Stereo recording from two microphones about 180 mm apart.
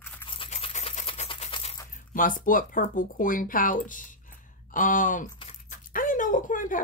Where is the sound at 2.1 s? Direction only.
50° left (ahead or behind).